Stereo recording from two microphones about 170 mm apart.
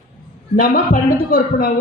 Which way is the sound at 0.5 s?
55° left (ahead or behind).